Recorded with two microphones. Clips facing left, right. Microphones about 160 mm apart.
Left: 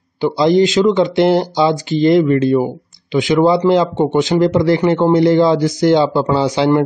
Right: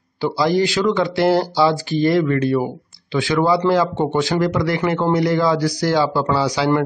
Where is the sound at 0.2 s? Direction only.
20° left (ahead or behind).